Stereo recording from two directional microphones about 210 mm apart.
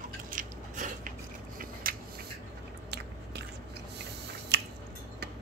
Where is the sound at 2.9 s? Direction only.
50° right (ahead or behind).